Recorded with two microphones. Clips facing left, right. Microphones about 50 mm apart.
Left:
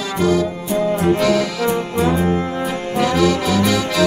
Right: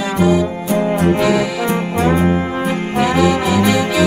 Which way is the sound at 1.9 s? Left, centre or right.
Right.